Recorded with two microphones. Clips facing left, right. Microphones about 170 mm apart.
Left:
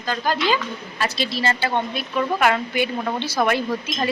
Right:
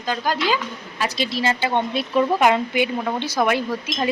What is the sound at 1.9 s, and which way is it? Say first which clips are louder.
A woman's voice: right 4 dB; 25° right (ahead or behind).